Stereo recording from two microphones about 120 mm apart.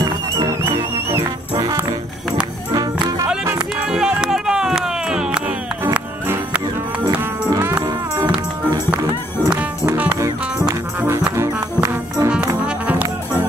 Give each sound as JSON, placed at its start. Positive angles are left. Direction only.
{"t": 0.0, "sound": "music", "side_deg": -30}
{"t": 2.7, "sound": "music", "side_deg": -30}
{"t": 3.5, "sound": "music", "side_deg": -5}
{"t": 6.2, "sound": "music", "side_deg": -20}
{"t": 9.8, "sound": "music", "side_deg": -10}